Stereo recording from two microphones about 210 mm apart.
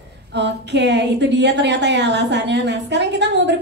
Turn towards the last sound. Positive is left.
turn(degrees=-55)  # may be behind; listen again after turning